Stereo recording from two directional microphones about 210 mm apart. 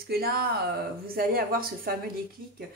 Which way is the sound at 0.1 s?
50° right (ahead or behind).